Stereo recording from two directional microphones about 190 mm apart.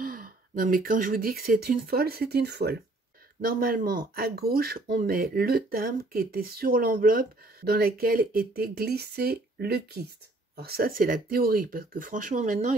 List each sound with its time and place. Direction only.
0.0 s speech: 50° right (ahead or behind)